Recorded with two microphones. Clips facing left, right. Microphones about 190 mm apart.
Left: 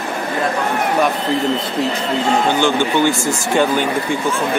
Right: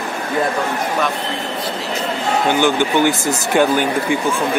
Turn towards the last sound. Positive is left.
turn(degrees=-10)  # may be behind; listen again after turning